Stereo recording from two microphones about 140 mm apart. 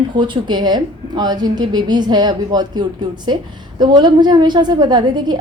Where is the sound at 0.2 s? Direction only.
35° right (ahead or behind).